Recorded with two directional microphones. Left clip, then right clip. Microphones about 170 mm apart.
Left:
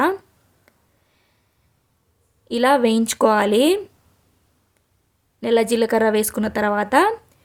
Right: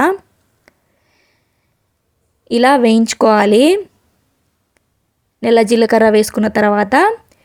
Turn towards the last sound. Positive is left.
turn(degrees=-30)  # may be behind; listen again after turning